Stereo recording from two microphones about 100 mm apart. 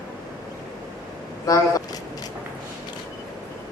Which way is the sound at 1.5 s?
35° left (ahead or behind).